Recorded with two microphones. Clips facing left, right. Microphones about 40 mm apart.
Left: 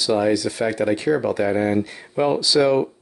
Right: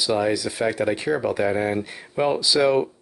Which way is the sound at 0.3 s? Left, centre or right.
Centre.